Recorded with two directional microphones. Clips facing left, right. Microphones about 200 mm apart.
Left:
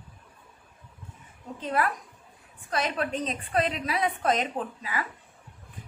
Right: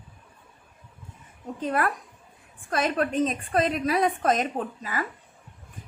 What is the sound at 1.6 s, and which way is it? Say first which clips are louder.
A woman's voice: right 2 dB; 50° right (ahead or behind).